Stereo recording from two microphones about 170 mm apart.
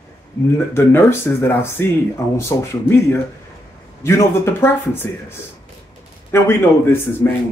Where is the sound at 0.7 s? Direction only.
15° left (ahead or behind).